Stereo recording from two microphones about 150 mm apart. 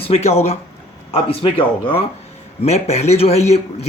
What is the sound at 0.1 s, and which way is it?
A man's voice, 45° left (ahead or behind).